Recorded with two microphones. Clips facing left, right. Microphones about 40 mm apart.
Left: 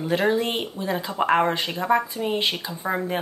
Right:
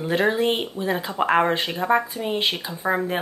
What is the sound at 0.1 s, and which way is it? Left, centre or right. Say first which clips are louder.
Speech: right 2 dB; centre.